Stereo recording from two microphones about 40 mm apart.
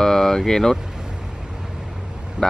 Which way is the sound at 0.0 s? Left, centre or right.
Centre.